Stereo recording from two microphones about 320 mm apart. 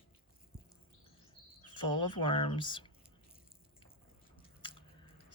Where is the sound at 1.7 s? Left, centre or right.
Centre.